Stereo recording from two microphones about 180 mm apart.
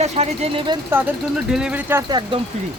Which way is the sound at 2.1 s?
25° right (ahead or behind).